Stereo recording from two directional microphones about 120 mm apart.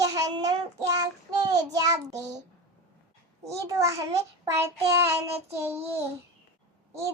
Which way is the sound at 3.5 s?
25° right (ahead or behind).